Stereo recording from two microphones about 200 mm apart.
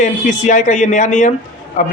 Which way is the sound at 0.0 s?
40° left (ahead or behind).